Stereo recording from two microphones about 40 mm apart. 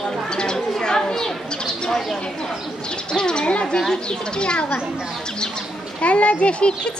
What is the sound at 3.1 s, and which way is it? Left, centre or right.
A child's voice, left.